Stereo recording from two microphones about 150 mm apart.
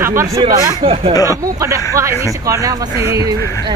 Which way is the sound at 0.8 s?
35° right (ahead or behind).